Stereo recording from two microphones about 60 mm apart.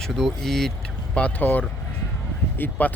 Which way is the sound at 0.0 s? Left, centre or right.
Centre.